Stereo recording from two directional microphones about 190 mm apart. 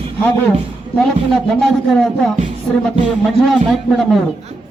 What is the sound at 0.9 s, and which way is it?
A man's voice, centre (ahead or behind).